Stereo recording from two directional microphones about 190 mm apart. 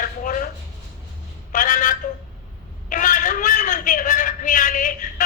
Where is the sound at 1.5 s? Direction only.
40° left (ahead or behind).